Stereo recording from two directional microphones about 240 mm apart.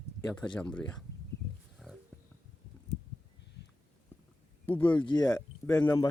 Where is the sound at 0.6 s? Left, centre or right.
Centre.